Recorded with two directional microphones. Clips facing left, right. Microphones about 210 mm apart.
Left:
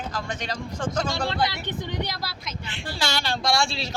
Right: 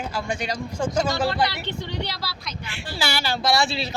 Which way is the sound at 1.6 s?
15° left (ahead or behind).